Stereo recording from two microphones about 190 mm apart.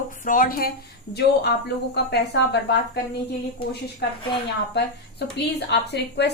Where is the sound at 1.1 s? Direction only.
60° left (ahead or behind).